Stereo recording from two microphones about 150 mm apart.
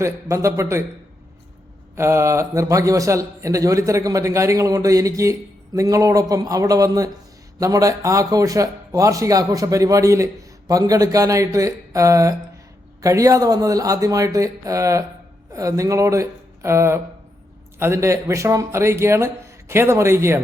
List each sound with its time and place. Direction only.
0.0 s a man's voice: 20° right (ahead or behind)
2.0 s a man's voice: 20° right (ahead or behind)